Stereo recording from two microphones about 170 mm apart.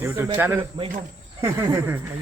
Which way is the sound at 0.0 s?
15° right (ahead or behind).